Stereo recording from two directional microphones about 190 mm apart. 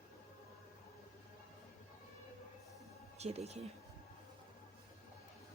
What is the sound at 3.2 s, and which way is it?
Speech, 35° right (ahead or behind).